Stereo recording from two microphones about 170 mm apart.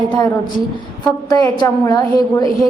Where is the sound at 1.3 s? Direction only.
20° left (ahead or behind).